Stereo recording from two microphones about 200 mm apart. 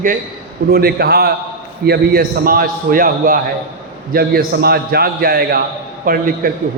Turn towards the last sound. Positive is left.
turn(degrees=-45)  # may be behind; listen again after turning